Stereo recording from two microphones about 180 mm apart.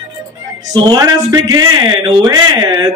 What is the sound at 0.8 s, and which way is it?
A man's voice, 20° right (ahead or behind).